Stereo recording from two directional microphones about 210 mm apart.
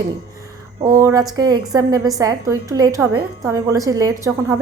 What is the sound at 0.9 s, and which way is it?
A woman's voice, 15° right (ahead or behind).